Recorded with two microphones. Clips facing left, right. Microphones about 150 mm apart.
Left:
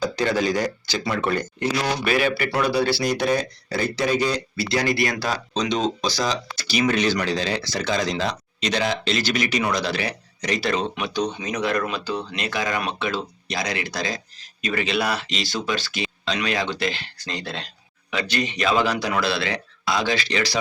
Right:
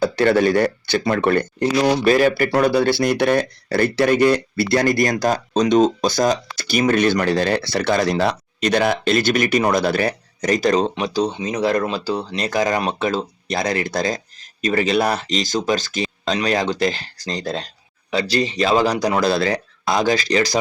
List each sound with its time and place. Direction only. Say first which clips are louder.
0.0 s speech: right 6 dB; 60° right (ahead or behind)
1.5 s speech: right 7 dB; 35° right (ahead or behind)